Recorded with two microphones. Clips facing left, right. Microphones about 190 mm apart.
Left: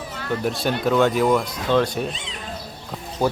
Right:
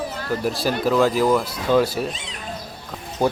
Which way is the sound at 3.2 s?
15° right (ahead or behind).